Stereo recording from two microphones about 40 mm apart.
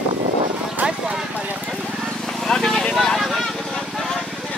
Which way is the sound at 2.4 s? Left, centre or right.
Centre.